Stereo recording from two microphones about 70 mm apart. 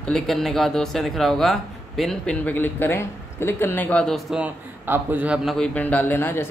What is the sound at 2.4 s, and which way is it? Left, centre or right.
Speech, left.